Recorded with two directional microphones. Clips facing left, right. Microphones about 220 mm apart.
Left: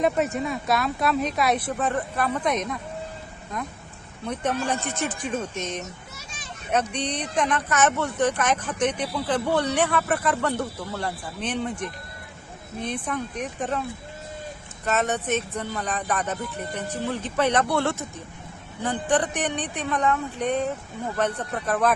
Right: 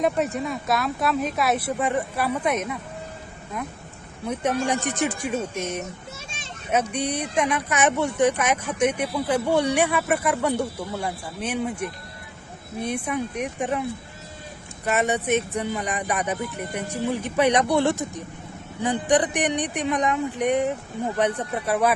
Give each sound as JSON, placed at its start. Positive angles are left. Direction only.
{"t": 0.0, "sound": "speech", "side_deg": 0}
{"t": 4.6, "sound": "speech", "side_deg": -15}
{"t": 6.1, "sound": "children playing", "side_deg": -25}
{"t": 6.7, "sound": "speech", "side_deg": -10}
{"t": 14.8, "sound": "speech", "side_deg": -10}